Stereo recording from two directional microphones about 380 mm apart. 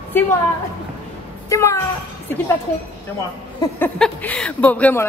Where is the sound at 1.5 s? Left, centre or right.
Centre.